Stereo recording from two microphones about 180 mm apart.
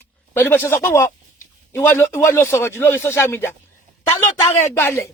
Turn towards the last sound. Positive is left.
turn(degrees=15)  # may be behind; listen again after turning